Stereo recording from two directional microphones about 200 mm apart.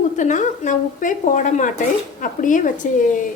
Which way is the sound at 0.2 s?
40° left (ahead or behind).